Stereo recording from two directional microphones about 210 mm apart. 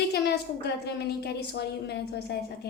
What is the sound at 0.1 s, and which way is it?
A woman's voice, 50° left (ahead or behind).